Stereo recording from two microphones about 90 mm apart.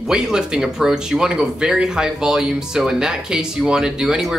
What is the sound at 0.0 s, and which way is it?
Speech, 5° right (ahead or behind).